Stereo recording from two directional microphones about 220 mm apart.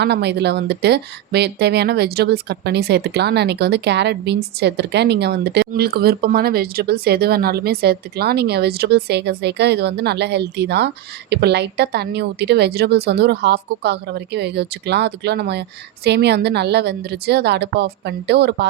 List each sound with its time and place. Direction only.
0.0 s speech: 50° right (ahead or behind)